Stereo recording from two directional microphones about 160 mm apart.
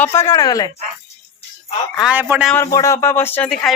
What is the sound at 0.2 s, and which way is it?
Speech, 20° left (ahead or behind).